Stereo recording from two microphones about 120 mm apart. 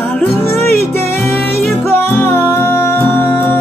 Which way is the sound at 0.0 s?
15° left (ahead or behind).